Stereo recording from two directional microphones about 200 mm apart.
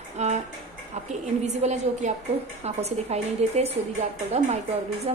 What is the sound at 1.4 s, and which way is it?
A woman's voice, 35° right (ahead or behind).